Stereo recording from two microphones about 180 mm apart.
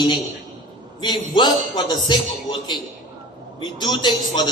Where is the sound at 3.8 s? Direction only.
25° left (ahead or behind).